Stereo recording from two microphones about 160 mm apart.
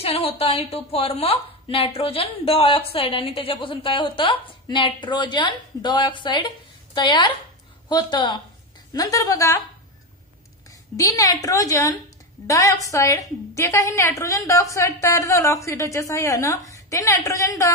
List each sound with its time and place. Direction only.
0.0 s a woman's voice: 40° left (ahead or behind); by 9.6 s 20° left (ahead or behind)
10.7 s a woman's voice: 20° left (ahead or behind)